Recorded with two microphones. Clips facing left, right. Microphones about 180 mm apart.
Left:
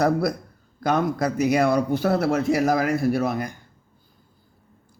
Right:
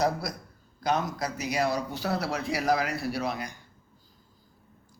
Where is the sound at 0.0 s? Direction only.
55° left (ahead or behind).